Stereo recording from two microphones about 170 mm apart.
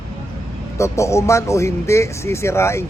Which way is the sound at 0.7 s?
15° left (ahead or behind).